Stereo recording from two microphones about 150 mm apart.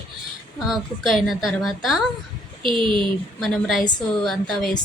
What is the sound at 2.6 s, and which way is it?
Speech, 35° right (ahead or behind).